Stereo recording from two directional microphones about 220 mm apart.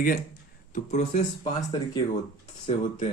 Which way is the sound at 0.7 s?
35° left (ahead or behind).